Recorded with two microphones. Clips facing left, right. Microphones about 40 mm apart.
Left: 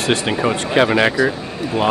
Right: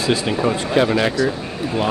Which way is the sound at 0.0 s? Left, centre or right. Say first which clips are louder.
Left 1 dB; left.